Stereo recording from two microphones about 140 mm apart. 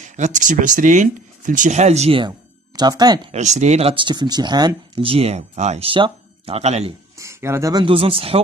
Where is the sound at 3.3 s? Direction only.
55° right (ahead or behind); by 5.1 s 30° right (ahead or behind).